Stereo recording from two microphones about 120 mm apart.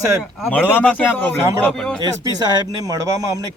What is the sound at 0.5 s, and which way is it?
Speech, 15° left (ahead or behind).